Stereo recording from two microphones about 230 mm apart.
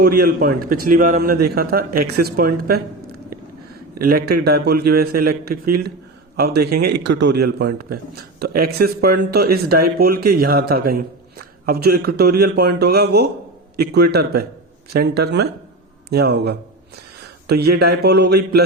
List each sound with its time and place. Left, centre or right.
0.0 s speech: right
4.0 s a man's voice: right